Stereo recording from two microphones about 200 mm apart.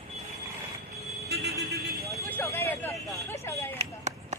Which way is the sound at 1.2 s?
55° right (ahead or behind).